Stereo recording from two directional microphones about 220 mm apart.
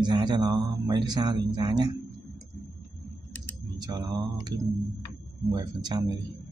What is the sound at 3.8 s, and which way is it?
Mantra, 20° right (ahead or behind).